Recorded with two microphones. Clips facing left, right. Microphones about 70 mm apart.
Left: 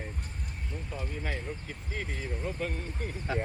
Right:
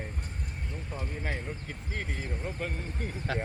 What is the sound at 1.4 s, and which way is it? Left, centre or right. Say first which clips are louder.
Speech: even; right.